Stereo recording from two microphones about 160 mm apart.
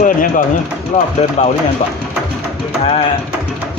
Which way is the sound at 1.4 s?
45° left (ahead or behind).